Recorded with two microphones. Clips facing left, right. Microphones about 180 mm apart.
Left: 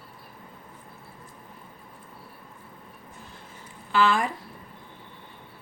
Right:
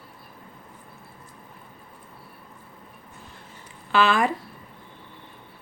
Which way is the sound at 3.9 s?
75° right (ahead or behind).